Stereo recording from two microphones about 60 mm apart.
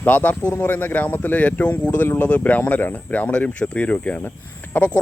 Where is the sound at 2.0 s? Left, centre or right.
Left.